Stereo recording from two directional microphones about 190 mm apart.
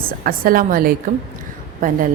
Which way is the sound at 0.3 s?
50° right (ahead or behind).